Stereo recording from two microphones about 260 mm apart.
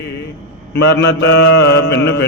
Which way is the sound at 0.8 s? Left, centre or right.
Left.